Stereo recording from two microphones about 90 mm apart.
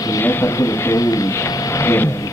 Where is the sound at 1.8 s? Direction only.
25° left (ahead or behind).